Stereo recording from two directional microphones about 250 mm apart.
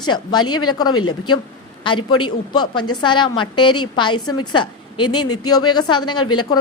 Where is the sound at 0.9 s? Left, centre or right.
Left.